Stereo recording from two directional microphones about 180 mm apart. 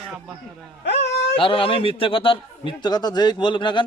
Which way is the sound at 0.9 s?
75° left (ahead or behind).